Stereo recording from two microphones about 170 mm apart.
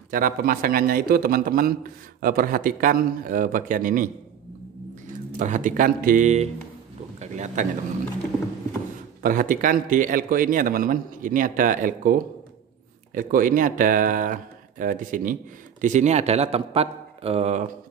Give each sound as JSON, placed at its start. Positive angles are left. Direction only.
{"t": 0.1, "sound": "a man's voice", "side_deg": -55}
{"t": 5.4, "sound": "a man's voice", "side_deg": -50}
{"t": 9.2, "sound": "a man's voice", "side_deg": -55}